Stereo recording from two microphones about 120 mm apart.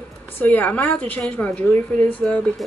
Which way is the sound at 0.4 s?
15° left (ahead or behind).